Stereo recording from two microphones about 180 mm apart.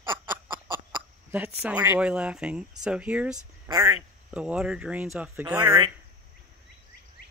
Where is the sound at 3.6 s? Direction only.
20° right (ahead or behind).